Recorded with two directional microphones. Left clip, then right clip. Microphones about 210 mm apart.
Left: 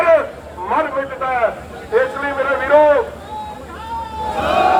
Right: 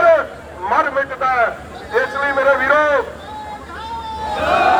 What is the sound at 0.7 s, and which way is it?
A man's voice, 40° right (ahead or behind).